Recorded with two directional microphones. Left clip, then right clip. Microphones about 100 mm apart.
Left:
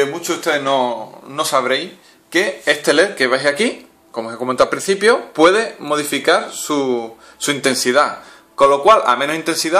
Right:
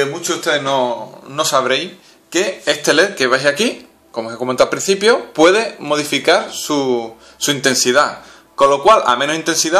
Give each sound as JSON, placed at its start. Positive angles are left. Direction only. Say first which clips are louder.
{"t": 0.0, "sound": "speech", "louder": "even", "side_deg": 40}
{"t": 1.3, "sound": "a man's voice", "louder": "right 1 dB", "side_deg": 20}